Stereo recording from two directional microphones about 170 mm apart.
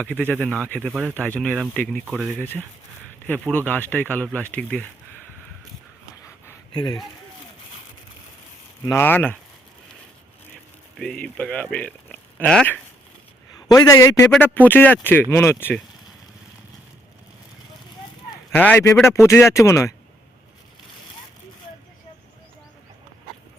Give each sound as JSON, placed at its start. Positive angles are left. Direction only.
{"t": 0.6, "sound": "speech", "side_deg": 5}
{"t": 6.2, "sound": "a sound", "side_deg": 20}
{"t": 8.9, "sound": "speech", "side_deg": 15}
{"t": 10.9, "sound": "speech", "side_deg": 5}
{"t": 13.6, "sound": "a man's voice", "side_deg": 20}
{"t": 18.5, "sound": "speech", "side_deg": 10}